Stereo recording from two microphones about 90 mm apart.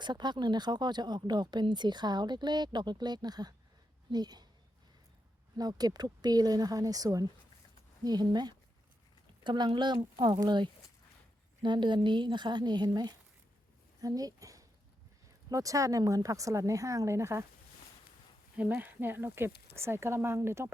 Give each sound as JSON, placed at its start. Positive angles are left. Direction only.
{"t": 0.0, "sound": "speech", "side_deg": -55}
{"t": 5.5, "sound": "speech", "side_deg": -45}
{"t": 18.5, "sound": "speech", "side_deg": -20}